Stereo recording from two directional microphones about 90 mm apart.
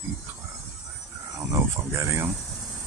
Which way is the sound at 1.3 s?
30° right (ahead or behind).